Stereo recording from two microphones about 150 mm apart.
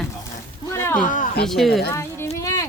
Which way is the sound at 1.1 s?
60° left (ahead or behind).